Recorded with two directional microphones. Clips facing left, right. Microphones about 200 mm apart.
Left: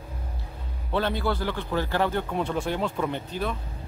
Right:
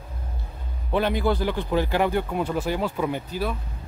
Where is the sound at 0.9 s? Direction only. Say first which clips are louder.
Right 3 dB; 15° right (ahead or behind).